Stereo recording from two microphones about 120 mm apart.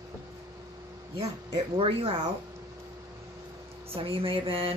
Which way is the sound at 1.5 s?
45° right (ahead or behind).